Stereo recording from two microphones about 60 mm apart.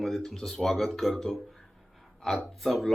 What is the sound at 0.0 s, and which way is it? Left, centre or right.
Speech, centre.